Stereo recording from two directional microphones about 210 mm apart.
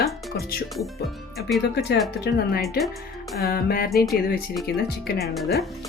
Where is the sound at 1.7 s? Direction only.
55° left (ahead or behind).